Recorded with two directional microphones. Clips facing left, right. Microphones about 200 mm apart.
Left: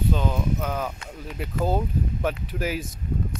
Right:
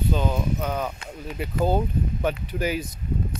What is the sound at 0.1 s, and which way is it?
Speech, centre (ahead or behind).